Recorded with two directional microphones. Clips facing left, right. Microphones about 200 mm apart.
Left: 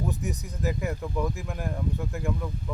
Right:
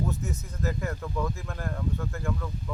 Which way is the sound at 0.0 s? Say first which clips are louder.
Left 1 dB; 15° left (ahead or behind).